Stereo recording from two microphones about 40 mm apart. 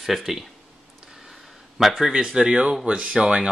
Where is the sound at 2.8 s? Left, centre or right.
Right.